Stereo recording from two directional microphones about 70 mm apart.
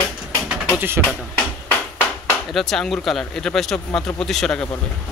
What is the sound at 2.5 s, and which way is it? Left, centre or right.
Speech, centre.